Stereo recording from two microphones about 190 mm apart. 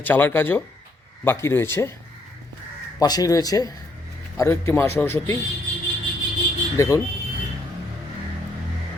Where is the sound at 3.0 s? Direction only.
20° left (ahead or behind).